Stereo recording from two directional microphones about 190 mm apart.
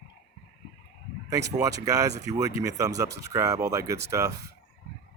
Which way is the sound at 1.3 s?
20° right (ahead or behind).